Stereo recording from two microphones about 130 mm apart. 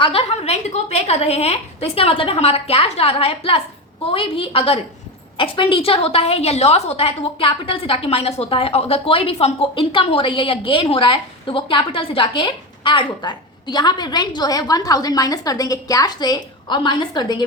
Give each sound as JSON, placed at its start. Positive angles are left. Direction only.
{"t": 0.0, "sound": "a woman's voice", "side_deg": 45}